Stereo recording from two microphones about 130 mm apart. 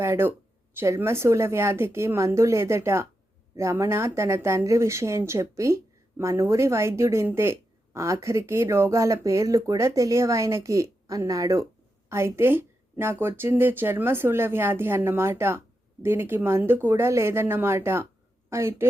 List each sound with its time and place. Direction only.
0.0 s speech: 20° right (ahead or behind)